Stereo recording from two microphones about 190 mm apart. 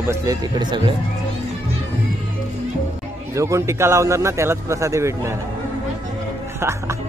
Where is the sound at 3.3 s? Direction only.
15° right (ahead or behind).